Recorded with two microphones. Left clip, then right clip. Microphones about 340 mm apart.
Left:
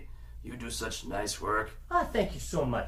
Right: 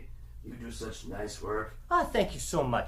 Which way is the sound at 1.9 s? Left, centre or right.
Centre.